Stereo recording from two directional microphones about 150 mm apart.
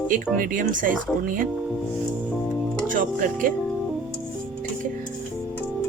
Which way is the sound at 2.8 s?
65° right (ahead or behind).